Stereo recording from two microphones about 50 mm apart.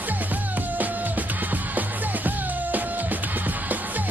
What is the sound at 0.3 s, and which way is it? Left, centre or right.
Music, right.